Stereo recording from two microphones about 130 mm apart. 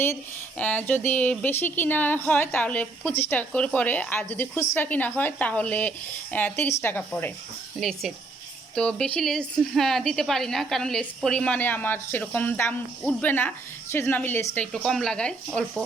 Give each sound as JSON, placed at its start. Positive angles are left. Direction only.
{"t": 0.6, "sound": "speech", "side_deg": 10}
{"t": 7.8, "sound": "speech", "side_deg": 0}